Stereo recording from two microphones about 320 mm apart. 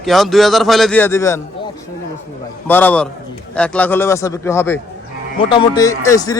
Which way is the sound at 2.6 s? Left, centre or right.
Centre.